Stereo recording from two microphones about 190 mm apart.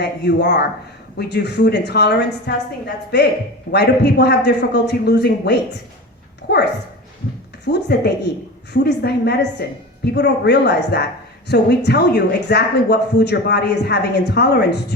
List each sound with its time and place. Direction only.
0.0 s speech: 60° left (ahead or behind)
7.6 s speech: 60° left (ahead or behind)